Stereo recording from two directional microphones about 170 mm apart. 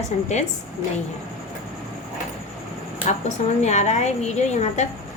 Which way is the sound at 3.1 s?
45° left (ahead or behind).